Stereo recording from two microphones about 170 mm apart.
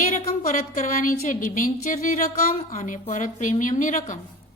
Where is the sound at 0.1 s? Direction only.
50° left (ahead or behind).